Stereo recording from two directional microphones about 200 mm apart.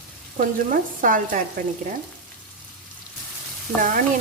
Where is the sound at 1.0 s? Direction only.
40° right (ahead or behind).